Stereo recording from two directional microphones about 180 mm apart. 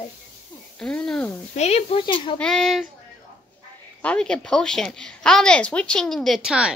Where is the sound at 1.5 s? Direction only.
35° left (ahead or behind).